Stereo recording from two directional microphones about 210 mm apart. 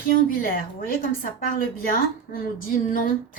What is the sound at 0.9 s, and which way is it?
A woman's voice, 45° left (ahead or behind).